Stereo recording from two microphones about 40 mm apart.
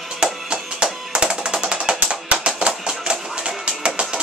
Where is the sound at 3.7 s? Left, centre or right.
Right.